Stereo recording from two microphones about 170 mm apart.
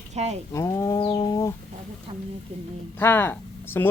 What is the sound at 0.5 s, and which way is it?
Speech, 15° left (ahead or behind).